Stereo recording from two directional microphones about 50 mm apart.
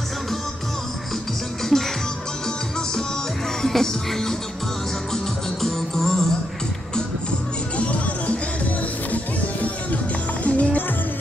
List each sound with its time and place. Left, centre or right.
1.6 s music: centre
3.6 s music: centre
7.7 s music: left